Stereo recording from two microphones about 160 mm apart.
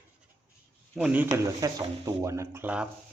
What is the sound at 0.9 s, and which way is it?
Speech, 10° right (ahead or behind).